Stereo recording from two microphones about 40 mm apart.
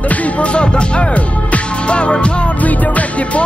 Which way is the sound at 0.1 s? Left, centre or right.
Left.